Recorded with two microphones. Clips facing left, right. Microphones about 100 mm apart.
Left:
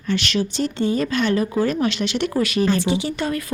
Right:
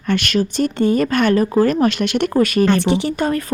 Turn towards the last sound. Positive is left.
turn(degrees=-45)  # may be behind; listen again after turning